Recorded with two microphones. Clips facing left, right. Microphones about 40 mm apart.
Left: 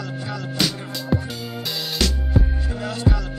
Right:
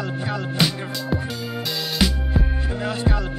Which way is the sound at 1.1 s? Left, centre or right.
Centre.